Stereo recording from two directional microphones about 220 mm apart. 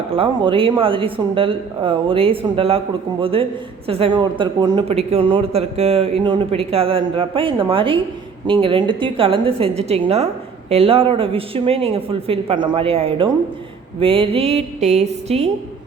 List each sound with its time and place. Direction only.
0.2 s speech: 25° right (ahead or behind)